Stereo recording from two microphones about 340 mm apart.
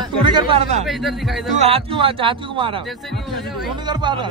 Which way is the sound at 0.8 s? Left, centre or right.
Centre.